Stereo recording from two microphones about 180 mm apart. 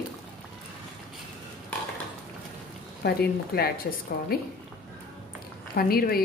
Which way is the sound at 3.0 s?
60° left (ahead or behind).